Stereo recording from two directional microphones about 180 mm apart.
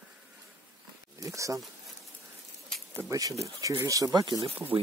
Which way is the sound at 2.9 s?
15° right (ahead or behind).